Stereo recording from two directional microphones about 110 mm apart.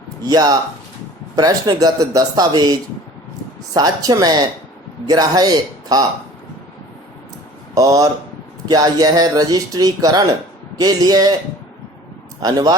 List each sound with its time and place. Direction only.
0.3 s speech: 35° right (ahead or behind)
3.8 s speech: 35° right (ahead or behind)
7.8 s speech: 30° right (ahead or behind)
12.4 s speech: 40° right (ahead or behind)